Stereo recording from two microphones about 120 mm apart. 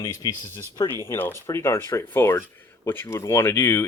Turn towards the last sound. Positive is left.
turn(degrees=20)  # may be behind; listen again after turning